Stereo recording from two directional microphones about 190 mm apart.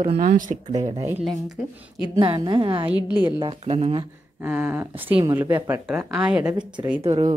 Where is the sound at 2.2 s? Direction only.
25° right (ahead or behind).